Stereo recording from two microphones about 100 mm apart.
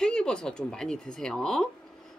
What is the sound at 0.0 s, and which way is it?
A woman's voice, 10° left (ahead or behind).